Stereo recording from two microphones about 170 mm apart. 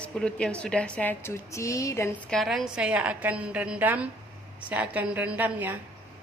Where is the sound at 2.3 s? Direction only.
Centre (ahead or behind).